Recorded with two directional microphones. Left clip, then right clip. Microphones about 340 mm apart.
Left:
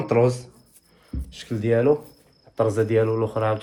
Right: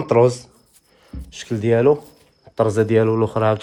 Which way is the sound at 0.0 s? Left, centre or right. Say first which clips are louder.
Right 5 dB; centre.